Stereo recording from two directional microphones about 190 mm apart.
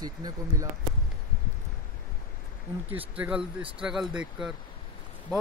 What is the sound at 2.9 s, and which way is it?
Speech, 10° right (ahead or behind).